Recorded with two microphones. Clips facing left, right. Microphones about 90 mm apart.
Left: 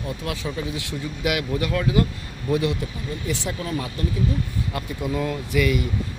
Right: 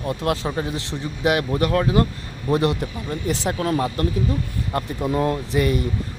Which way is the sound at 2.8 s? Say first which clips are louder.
Right 3 dB; 50° right (ahead or behind).